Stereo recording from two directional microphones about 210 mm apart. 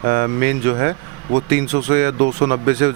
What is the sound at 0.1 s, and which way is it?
Speech, 45° right (ahead or behind).